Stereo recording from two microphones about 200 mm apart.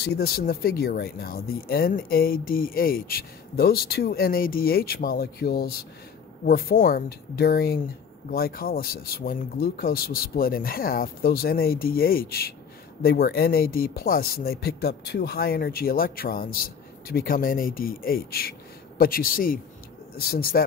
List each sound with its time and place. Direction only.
0.0 s speech: 50° left (ahead or behind)